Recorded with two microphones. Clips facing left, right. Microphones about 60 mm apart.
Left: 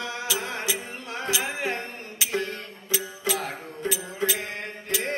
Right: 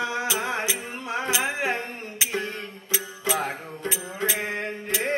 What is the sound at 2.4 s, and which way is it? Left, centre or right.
Music, right.